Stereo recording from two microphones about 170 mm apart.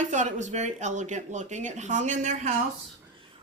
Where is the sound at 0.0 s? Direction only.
45° right (ahead or behind).